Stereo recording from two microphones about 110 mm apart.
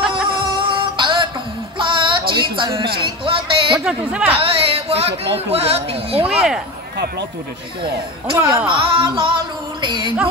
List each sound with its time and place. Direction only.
0.6 s music: 45° right (ahead or behind)
3.8 s speech: 10° right (ahead or behind)
4.4 s speech: 65° right (ahead or behind)
6.2 s speech: 5° right (ahead or behind)
8.4 s speech: 15° right (ahead or behind)
8.6 s music: 45° right (ahead or behind)